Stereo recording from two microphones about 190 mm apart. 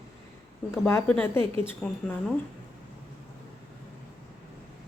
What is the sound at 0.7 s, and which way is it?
A woman's voice, 10° left (ahead or behind).